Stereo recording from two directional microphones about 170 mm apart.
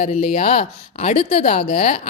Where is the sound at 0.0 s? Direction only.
40° left (ahead or behind).